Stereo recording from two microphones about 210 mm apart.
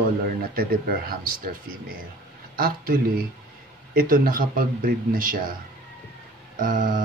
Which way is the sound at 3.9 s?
45° right (ahead or behind).